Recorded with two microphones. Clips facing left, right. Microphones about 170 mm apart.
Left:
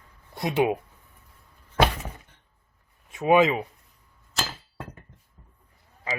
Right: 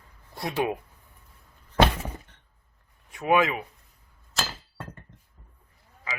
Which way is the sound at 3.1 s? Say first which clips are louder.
Left 4 dB; 20° left (ahead or behind).